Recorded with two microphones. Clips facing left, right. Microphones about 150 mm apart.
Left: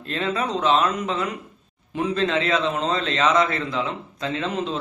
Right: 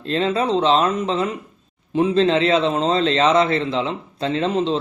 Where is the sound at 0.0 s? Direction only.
30° right (ahead or behind).